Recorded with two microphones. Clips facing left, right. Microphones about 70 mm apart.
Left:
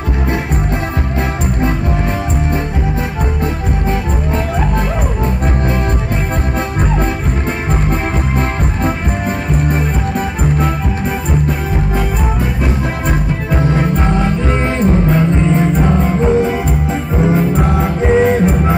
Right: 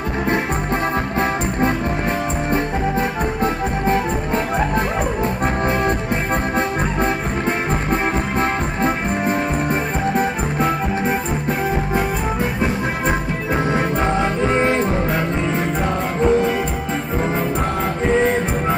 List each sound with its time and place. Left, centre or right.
7.9 s music: right
15.8 s music: centre